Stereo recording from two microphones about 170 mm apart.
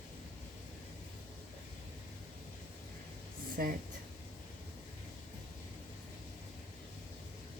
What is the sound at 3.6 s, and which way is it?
Speech, 60° right (ahead or behind).